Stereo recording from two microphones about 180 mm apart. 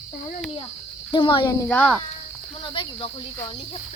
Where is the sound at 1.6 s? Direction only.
5° left (ahead or behind).